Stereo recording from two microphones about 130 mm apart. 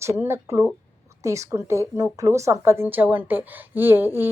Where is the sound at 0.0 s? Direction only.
20° right (ahead or behind).